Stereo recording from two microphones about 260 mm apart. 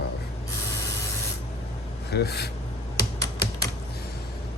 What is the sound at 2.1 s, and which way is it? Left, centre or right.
Speech, left.